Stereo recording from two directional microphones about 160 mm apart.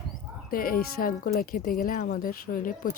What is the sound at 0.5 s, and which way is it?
Speech, 65° left (ahead or behind).